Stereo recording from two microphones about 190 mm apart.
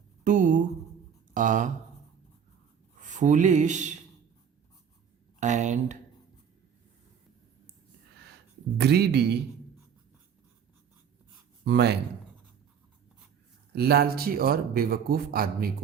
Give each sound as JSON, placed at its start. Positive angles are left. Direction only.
{"t": 0.3, "sound": "a sound", "side_deg": -45}
{"t": 1.3, "sound": "speech", "side_deg": -40}
{"t": 3.0, "sound": "speech", "side_deg": -40}
{"t": 5.4, "sound": "speech", "side_deg": -40}
{"t": 8.8, "sound": "speech", "side_deg": -60}
{"t": 11.6, "sound": "speech", "side_deg": -60}
{"t": 13.7, "sound": "a man's voice", "side_deg": -55}